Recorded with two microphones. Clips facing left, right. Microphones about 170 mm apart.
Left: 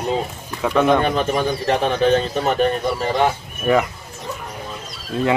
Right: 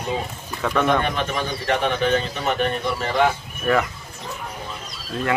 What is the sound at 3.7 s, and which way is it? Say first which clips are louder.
Speech: left 3 dB; 20° left (ahead or behind).